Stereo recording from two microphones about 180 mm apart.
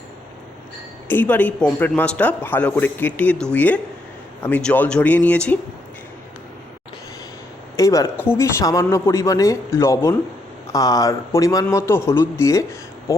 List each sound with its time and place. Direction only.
1.0 s speech: 10° left (ahead or behind)
7.8 s speech: 20° left (ahead or behind)